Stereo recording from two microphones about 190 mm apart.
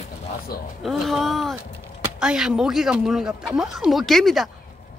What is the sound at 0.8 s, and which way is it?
Speech, centre (ahead or behind).